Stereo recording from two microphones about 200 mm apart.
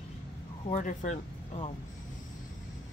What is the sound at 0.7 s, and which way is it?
Speech, 40° left (ahead or behind).